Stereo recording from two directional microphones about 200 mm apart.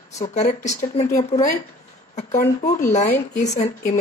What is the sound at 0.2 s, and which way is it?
Speech, 35° left (ahead or behind).